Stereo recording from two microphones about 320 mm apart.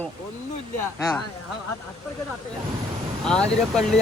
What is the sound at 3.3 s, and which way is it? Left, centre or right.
Speech, centre.